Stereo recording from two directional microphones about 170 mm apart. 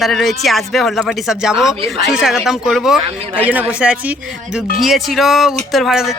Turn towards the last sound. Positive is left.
turn(degrees=0)  # may be behind; listen again after turning